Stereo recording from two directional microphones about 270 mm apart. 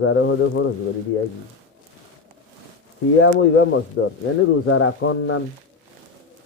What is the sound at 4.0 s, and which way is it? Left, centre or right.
Speech, left.